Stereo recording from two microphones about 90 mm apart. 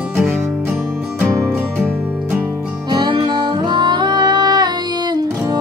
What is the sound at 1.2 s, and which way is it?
Music, 25° right (ahead or behind).